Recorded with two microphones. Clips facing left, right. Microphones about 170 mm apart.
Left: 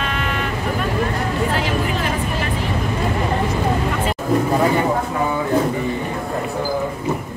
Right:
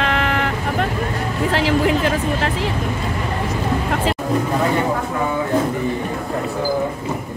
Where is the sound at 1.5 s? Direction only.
90° right.